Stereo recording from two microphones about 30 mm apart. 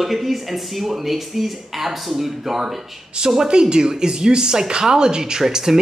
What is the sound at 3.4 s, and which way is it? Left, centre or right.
Speech, right.